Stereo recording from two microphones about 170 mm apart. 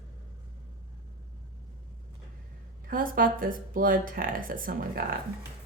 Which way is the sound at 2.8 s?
55° right (ahead or behind).